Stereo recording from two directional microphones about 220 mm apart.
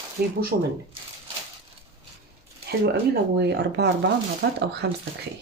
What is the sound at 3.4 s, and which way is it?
Speech, 50° right (ahead or behind).